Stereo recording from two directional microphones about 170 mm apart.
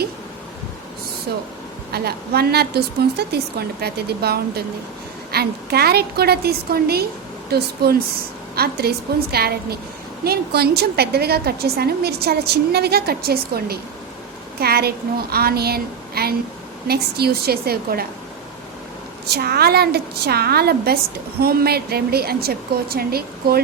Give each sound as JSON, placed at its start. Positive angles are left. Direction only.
{"t": 1.3, "sound": "a woman's voice", "side_deg": -65}
{"t": 19.3, "sound": "a woman's voice", "side_deg": -70}